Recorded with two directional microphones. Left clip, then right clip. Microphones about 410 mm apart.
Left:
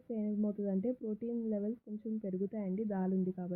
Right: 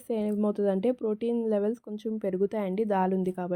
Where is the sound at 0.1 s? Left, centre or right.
Centre.